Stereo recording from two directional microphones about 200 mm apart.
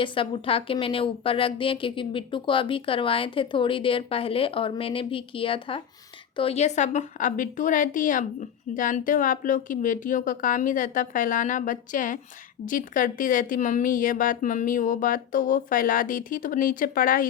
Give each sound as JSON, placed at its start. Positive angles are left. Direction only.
{"t": 0.0, "sound": "a woman's voice", "side_deg": 25}